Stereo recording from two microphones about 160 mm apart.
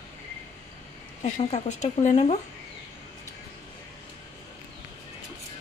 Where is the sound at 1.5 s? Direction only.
50° left (ahead or behind).